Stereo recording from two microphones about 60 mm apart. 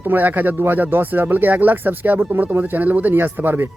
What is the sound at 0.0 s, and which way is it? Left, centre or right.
Speech, right.